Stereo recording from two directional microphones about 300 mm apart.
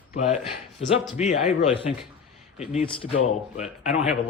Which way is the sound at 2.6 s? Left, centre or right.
Left.